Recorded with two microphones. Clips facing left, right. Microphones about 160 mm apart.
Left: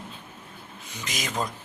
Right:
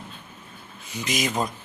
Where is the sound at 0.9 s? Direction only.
10° right (ahead or behind).